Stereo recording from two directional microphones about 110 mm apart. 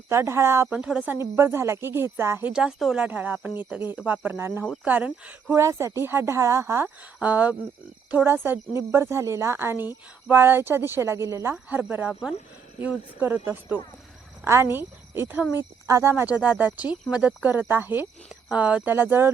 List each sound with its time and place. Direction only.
0.1 s a woman's voice: 25° right (ahead or behind)
0.8 s a woman's voice: 10° right (ahead or behind)
2.5 s speech: 5° right (ahead or behind)
5.5 s a woman's voice: 25° right (ahead or behind)
6.8 s a woman's voice: 15° right (ahead or behind)
11.5 s a woman's voice: 15° right (ahead or behind)
16.3 s speech: 10° right (ahead or behind)